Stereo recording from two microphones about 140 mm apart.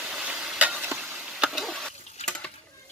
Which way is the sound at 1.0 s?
Centre (ahead or behind).